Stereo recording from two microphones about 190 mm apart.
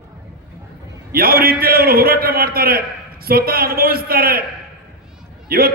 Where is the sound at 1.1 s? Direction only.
50° right (ahead or behind).